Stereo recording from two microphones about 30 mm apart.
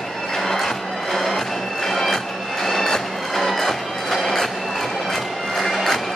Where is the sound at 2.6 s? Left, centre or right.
Centre.